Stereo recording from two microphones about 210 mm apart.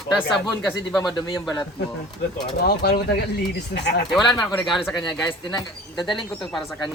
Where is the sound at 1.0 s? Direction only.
20° left (ahead or behind).